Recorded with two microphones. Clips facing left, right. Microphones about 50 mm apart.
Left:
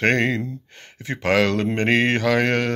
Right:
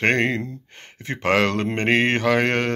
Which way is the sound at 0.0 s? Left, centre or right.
Right.